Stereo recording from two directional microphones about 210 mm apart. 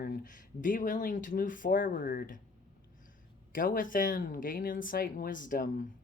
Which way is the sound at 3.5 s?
40° left (ahead or behind).